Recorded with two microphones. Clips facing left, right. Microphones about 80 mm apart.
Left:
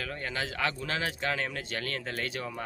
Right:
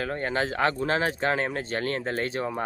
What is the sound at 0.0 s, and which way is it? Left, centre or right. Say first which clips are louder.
Speech: right 7 dB; right.